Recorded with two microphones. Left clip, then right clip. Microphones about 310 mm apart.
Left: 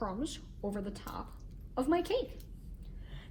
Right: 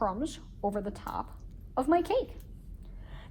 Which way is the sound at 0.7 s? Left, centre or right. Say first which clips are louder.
Right 5 dB; centre.